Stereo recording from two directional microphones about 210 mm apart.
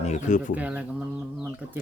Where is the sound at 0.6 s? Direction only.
5° right (ahead or behind).